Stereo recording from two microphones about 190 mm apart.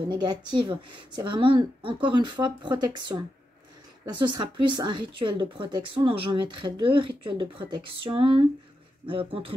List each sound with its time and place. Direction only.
0.1 s speech: 20° right (ahead or behind)